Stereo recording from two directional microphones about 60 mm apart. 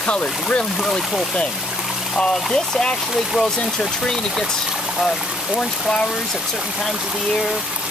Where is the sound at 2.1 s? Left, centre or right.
Centre.